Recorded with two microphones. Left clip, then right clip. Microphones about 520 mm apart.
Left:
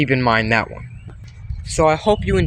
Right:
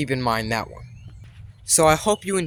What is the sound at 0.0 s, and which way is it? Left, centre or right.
Speech, right.